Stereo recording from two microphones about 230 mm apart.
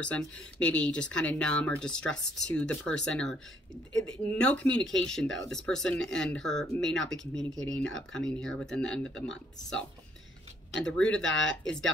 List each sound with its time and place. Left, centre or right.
0.0 s speech: centre
4.0 s speech: right
4.4 s speech: centre